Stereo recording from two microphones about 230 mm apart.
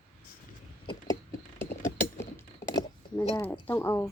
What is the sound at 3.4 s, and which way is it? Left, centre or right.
Speech, centre.